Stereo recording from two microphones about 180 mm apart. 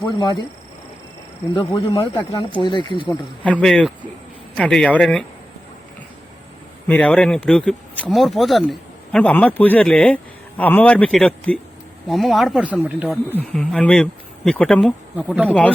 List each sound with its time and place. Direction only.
1.5 s speech: 30° left (ahead or behind)
3.1 s speech: 5° left (ahead or behind)
6.8 s speech: 10° left (ahead or behind); by 13.1 s 10° right (ahead or behind)
13.3 s speech: 5° left (ahead or behind)